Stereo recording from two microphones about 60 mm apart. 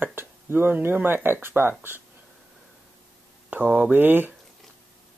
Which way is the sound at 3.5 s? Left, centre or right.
Right.